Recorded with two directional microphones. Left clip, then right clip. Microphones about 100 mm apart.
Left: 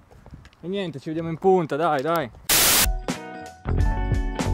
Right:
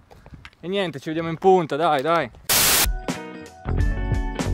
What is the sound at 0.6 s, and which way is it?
Speech, 25° right (ahead or behind).